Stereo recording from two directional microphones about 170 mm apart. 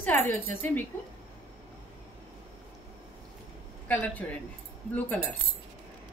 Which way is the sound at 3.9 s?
10° left (ahead or behind).